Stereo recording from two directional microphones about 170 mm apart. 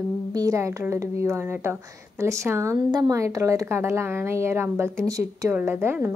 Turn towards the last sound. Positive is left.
turn(degrees=-15)  # may be behind; listen again after turning